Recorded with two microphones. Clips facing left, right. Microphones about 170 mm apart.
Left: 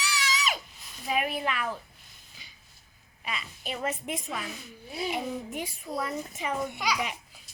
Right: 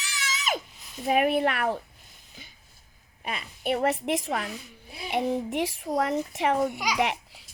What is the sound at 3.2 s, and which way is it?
A woman's voice, 55° right (ahead or behind).